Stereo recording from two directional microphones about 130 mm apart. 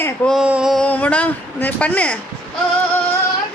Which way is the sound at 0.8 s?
10° left (ahead or behind).